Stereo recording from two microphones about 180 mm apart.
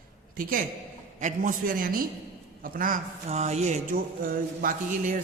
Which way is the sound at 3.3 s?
35° right (ahead or behind).